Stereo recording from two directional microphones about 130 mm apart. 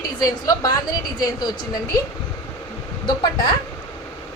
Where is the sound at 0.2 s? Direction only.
30° left (ahead or behind).